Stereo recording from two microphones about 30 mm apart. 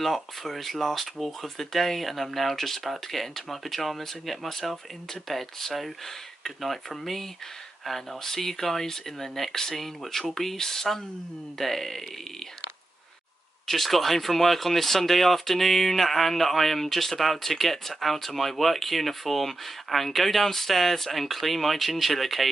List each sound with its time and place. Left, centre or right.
0.0 s speech: centre
8.2 s speech: centre
13.7 s speech: centre